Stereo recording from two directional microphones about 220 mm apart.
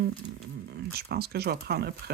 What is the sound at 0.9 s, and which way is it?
Speech, 45° right (ahead or behind).